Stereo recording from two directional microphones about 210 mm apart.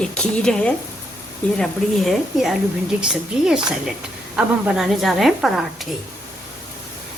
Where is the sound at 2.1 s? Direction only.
Centre (ahead or behind).